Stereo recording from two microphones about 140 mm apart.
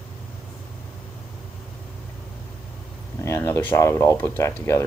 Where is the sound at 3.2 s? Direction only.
20° left (ahead or behind).